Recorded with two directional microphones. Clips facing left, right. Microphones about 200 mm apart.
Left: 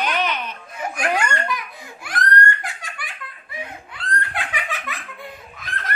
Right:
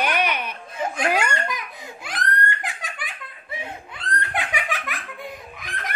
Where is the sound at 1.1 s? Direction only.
15° right (ahead or behind).